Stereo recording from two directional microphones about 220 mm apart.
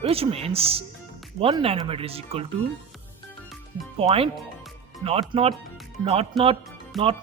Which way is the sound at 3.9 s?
25° right (ahead or behind).